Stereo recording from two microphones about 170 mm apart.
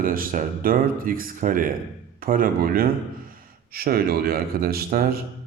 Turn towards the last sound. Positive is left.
turn(degrees=-65)  # may be behind; listen again after turning